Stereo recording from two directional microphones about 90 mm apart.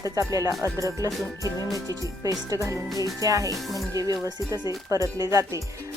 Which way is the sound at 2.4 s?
35° right (ahead or behind).